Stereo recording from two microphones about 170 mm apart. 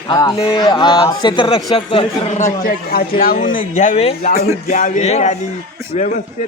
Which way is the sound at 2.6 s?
60° left (ahead or behind).